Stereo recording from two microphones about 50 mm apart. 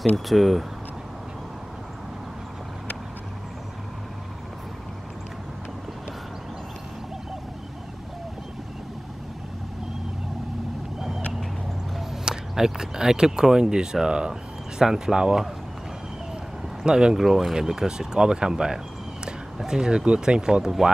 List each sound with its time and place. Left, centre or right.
0.1 s speech: centre
11.0 s vehicle: centre
12.3 s speech: centre
16.8 s speech: centre